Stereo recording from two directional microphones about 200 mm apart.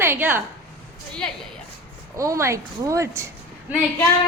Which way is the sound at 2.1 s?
15° right (ahead or behind).